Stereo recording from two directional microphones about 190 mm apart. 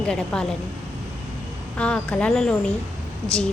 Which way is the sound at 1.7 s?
5° left (ahead or behind).